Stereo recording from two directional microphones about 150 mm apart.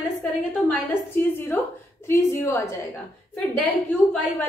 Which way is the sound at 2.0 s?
20° left (ahead or behind).